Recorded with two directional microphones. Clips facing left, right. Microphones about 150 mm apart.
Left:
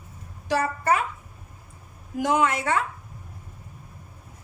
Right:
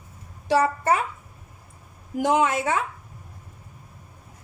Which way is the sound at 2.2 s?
20° right (ahead or behind).